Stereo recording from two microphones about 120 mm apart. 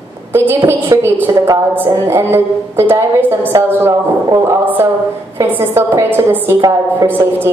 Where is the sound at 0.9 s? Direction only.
30° right (ahead or behind).